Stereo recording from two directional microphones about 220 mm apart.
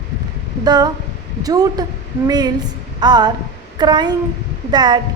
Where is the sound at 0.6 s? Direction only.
20° right (ahead or behind).